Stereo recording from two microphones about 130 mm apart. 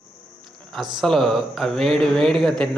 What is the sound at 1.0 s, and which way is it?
Speech, centre (ahead or behind).